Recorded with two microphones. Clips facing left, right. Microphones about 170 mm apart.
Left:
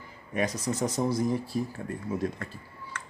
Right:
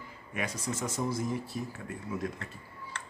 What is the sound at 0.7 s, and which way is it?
Speech, 35° left (ahead or behind).